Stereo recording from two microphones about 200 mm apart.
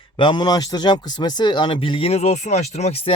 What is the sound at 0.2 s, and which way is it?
A man's voice, 20° left (ahead or behind).